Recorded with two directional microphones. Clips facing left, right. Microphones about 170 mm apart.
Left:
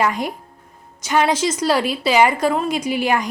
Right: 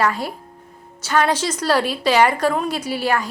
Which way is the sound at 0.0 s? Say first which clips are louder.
Left 1 dB; 15° left (ahead or behind).